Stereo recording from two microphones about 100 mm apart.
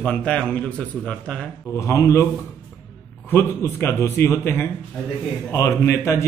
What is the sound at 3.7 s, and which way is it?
A man's voice, 20° left (ahead or behind).